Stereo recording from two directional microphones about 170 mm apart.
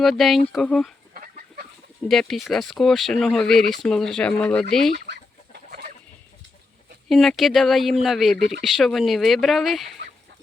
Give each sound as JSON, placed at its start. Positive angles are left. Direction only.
{"t": 0.0, "sound": "speech", "side_deg": 0}
{"t": 1.1, "sound": "fowl", "side_deg": -55}
{"t": 2.0, "sound": "speech", "side_deg": 0}
{"t": 7.1, "sound": "speech", "side_deg": 0}